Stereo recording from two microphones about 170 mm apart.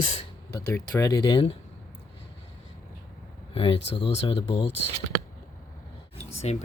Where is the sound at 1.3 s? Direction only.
35° left (ahead or behind).